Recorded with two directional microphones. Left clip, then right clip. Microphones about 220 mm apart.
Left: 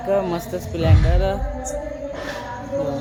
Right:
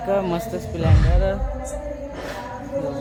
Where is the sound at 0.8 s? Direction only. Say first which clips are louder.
Left 2 dB; 15° left (ahead or behind).